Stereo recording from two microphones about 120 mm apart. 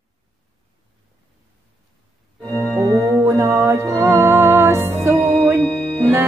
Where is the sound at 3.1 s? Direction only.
25° right (ahead or behind).